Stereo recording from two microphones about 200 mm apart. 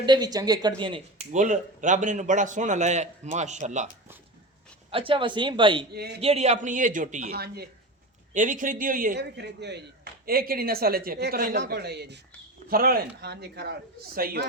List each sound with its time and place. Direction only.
0.0 s speech: 20° right (ahead or behind)
1.3 s a man's voice: 40° right (ahead or behind)
4.9 s speech: 25° right (ahead or behind)
5.9 s speech: 55° right (ahead or behind)
6.1 s a man's voice: 30° right (ahead or behind); by 7.7 s 50° right (ahead or behind)
8.3 s speech: 40° right (ahead or behind)